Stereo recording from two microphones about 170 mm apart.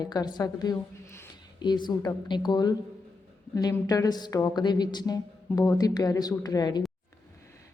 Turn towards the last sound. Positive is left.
turn(degrees=25)  # may be behind; listen again after turning